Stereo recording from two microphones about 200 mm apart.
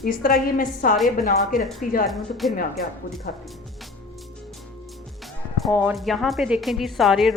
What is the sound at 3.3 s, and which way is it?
Speech, 40° left (ahead or behind).